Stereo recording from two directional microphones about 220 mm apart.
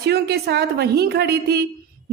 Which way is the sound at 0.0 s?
45° right (ahead or behind).